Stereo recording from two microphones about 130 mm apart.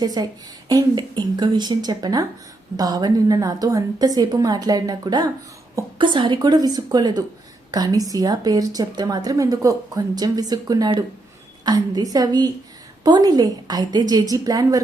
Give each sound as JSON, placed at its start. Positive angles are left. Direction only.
{"t": 0.0, "sound": "a woman's voice", "side_deg": -30}